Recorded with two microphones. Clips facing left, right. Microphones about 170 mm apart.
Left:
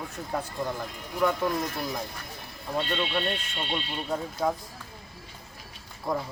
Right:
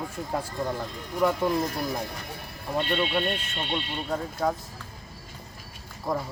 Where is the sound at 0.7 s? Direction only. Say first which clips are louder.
Right 2 dB; 10° right (ahead or behind).